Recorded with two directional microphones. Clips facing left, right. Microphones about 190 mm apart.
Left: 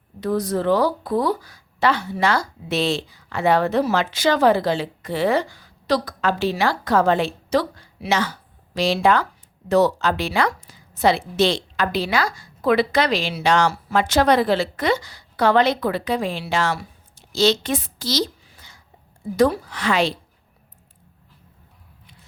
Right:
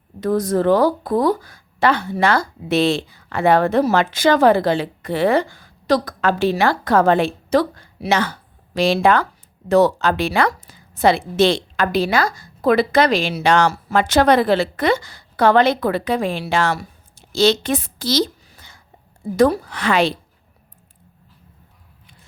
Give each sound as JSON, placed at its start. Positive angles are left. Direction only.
{"t": 0.2, "sound": "a woman's voice", "side_deg": -50}